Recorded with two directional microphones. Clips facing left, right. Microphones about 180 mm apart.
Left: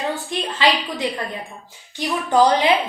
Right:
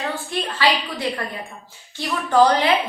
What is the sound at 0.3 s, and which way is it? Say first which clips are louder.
A woman's voice: even; 20° left (ahead or behind).